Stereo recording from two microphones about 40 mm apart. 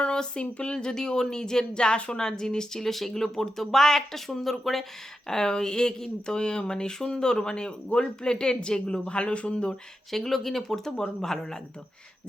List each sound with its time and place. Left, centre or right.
0.0 s speech: left
2.1 s speech: centre
5.3 s speech: centre
10.1 s speech: centre